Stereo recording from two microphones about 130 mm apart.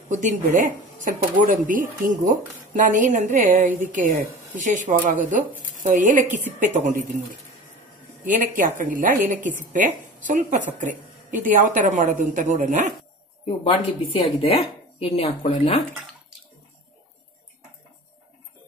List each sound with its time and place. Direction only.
0.1 s speech: 75° right (ahead or behind)
0.6 s a woman's voice: 90° right
8.3 s a woman's voice: 90° right
10.2 s speech: 70° right (ahead or behind)
10.8 s a woman's voice: 85° right
14.2 s speech: 50° left (ahead or behind)